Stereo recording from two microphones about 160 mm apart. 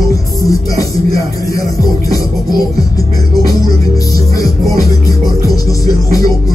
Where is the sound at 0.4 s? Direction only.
20° left (ahead or behind).